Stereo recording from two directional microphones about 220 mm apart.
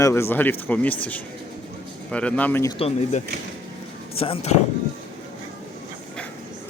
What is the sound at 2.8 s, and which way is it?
Speech, 25° left (ahead or behind).